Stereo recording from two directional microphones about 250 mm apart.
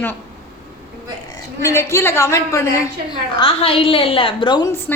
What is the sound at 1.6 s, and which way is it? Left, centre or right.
A woman's voice, centre.